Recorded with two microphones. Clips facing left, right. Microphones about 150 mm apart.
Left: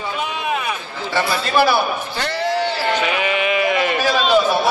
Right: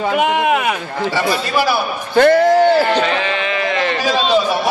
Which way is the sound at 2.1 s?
50° right (ahead or behind).